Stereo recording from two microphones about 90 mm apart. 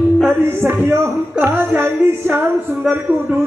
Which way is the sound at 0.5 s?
25° right (ahead or behind).